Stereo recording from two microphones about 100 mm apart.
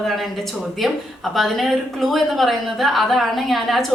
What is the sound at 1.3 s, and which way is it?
A woman's voice, centre (ahead or behind).